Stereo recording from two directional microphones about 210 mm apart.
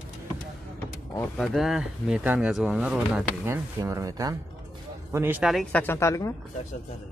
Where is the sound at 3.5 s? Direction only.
15° right (ahead or behind); by 6.3 s 15° left (ahead or behind).